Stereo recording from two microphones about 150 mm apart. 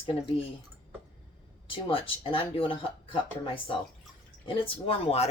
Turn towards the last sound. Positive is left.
turn(degrees=40)  # may be behind; listen again after turning